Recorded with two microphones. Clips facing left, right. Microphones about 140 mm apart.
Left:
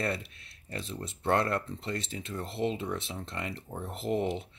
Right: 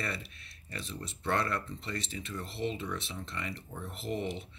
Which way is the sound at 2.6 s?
75° left (ahead or behind).